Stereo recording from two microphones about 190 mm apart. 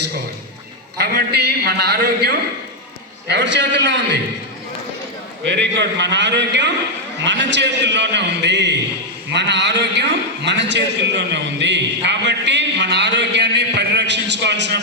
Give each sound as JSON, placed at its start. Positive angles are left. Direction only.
{"t": 0.9, "sound": "a man's voice", "side_deg": -55}
{"t": 5.5, "sound": "a man's voice", "side_deg": -70}